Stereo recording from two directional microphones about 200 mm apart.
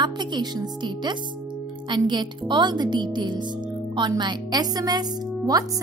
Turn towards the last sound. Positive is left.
turn(degrees=-20)  # may be behind; listen again after turning